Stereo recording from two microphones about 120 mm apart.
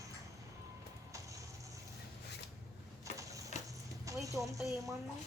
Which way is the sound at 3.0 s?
25° right (ahead or behind).